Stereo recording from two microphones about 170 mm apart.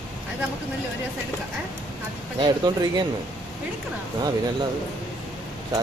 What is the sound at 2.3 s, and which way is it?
Speech, 25° right (ahead or behind).